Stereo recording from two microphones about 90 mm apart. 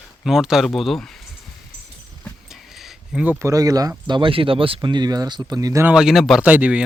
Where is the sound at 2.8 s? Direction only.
5° right (ahead or behind).